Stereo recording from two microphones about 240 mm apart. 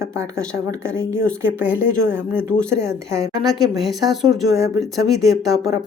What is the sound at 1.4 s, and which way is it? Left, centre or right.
Speech, centre.